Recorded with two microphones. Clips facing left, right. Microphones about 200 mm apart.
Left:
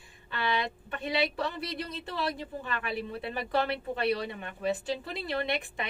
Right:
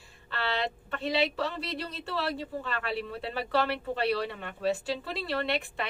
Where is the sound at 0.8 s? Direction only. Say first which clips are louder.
Right 2 dB; 15° left (ahead or behind).